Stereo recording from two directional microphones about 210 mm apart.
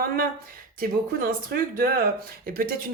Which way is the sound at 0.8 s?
45° right (ahead or behind).